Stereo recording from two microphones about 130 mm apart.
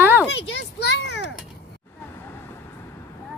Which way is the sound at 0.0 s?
15° right (ahead or behind).